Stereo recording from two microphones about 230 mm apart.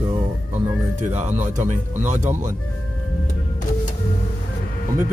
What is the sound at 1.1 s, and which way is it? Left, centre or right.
Speech, right.